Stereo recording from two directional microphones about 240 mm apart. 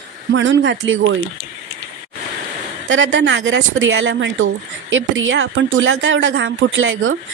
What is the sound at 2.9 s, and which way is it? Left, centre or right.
Speech, right.